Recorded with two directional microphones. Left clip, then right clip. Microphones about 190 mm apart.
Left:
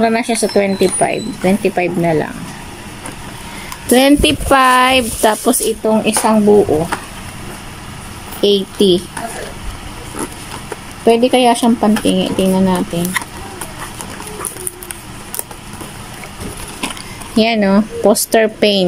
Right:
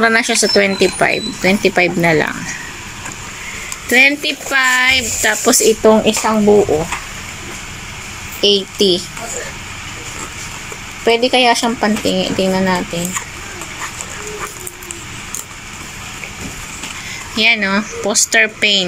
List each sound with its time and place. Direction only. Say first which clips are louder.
0.0 s speech: right 2 dB; 15° left (ahead or behind)
3.9 s speech: left 1 dB; 35° left (ahead or behind)
5.3 s speech: right 2 dB; 15° left (ahead or behind)
5.8 s speech: right 3 dB; 5° left (ahead or behind)
8.4 s speech: even; 20° left (ahead or behind)
11.1 s speech: left 1 dB; 20° left (ahead or behind)
17.4 s speech: even; 25° left (ahead or behind)